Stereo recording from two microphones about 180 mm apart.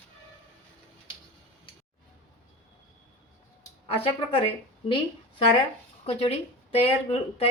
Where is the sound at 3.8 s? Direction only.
30° left (ahead or behind).